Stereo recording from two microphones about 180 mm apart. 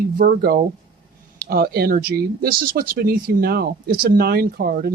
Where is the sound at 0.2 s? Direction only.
50° right (ahead or behind).